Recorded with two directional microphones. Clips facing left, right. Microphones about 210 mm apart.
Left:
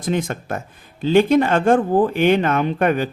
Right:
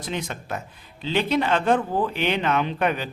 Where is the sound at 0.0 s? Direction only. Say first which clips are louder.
Left 8 dB; 50° left (ahead or behind).